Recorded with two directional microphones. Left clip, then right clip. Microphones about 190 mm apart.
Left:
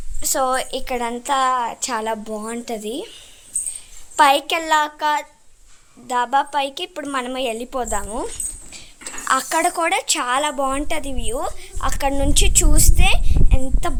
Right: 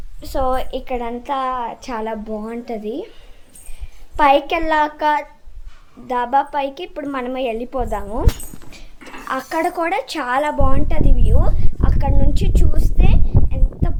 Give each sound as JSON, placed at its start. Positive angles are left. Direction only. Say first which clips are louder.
{"t": 0.2, "sound": "a woman's voice", "louder": "left 1 dB", "side_deg": 5}
{"t": 4.2, "sound": "a woman's voice", "louder": "right 1 dB", "side_deg": 5}